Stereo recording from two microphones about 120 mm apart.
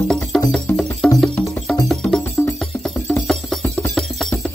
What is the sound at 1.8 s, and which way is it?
Music, 5° left (ahead or behind).